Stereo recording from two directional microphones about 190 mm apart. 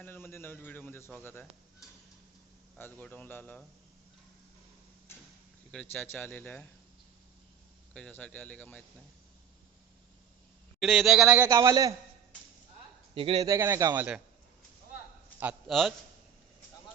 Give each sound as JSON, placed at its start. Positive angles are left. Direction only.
{"t": 0.0, "sound": "speech", "side_deg": 10}
{"t": 5.7, "sound": "speech", "side_deg": 5}
{"t": 7.9, "sound": "speech", "side_deg": 5}
{"t": 10.8, "sound": "a man's voice", "side_deg": 0}
{"t": 13.1, "sound": "a man's voice", "side_deg": -25}
{"t": 15.4, "sound": "a man's voice", "side_deg": -5}